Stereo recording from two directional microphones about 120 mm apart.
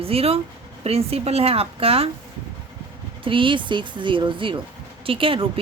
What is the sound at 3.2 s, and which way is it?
Speech, 45° right (ahead or behind).